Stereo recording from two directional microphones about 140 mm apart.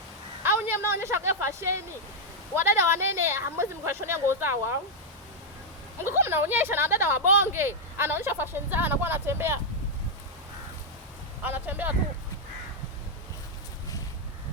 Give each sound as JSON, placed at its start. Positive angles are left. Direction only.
{"t": 0.4, "sound": "a woman's voice", "side_deg": -15}
{"t": 6.1, "sound": "speech", "side_deg": -15}
{"t": 11.4, "sound": "speech", "side_deg": -15}